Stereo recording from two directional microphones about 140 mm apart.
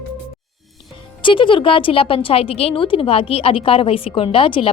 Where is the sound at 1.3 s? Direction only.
35° left (ahead or behind).